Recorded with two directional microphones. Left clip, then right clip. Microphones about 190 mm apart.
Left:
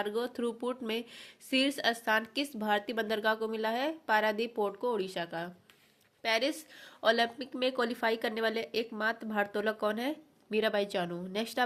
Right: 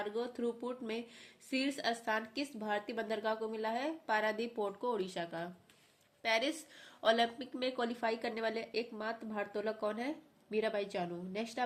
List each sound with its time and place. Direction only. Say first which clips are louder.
0.0 s speech: left 4 dB; 35° left (ahead or behind)